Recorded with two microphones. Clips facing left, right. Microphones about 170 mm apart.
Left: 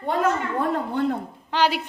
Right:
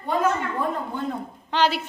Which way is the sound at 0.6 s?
65° left (ahead or behind).